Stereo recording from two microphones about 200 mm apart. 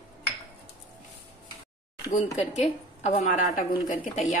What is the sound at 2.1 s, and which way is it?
A woman's voice, 35° left (ahead or behind).